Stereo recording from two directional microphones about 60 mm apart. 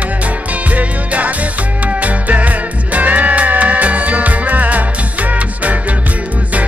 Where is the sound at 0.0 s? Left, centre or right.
Right.